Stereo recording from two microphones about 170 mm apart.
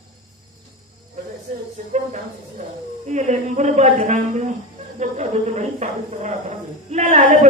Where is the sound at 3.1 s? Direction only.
45° right (ahead or behind).